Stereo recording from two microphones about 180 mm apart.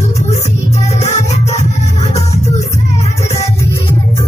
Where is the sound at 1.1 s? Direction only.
40° left (ahead or behind).